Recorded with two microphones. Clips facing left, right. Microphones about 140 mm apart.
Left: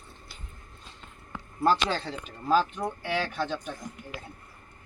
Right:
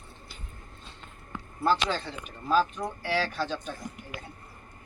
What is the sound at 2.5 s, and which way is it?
Speech, 25° left (ahead or behind).